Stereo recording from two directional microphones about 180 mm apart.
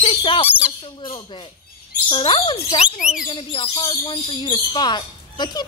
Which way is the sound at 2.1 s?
30° left (ahead or behind).